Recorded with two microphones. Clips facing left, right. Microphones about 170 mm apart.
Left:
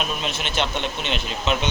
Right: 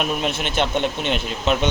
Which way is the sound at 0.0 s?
55° right (ahead or behind).